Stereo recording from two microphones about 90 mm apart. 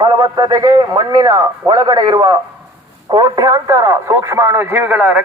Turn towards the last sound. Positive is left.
turn(degrees=-20)  # may be behind; listen again after turning